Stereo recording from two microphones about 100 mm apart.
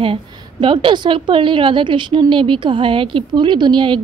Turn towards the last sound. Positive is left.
turn(degrees=-55)  # may be behind; listen again after turning